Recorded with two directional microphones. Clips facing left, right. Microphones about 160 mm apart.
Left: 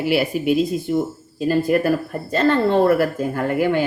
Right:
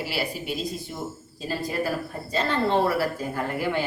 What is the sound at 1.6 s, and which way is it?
Speech, 60° left (ahead or behind).